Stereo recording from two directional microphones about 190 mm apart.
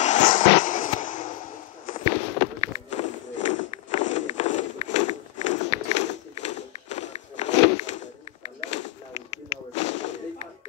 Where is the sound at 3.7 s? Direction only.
40° left (ahead or behind).